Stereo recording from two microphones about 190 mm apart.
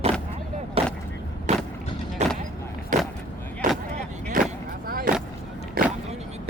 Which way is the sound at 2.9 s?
45° right (ahead or behind).